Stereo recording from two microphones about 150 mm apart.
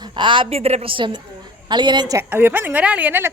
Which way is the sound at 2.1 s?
10° right (ahead or behind).